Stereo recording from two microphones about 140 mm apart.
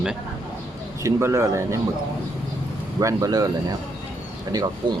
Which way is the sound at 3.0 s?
25° right (ahead or behind).